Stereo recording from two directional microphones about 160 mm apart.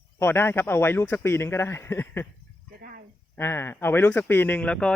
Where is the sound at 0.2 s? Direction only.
15° left (ahead or behind).